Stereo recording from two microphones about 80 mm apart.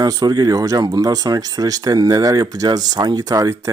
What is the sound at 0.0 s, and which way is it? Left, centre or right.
Speech, right.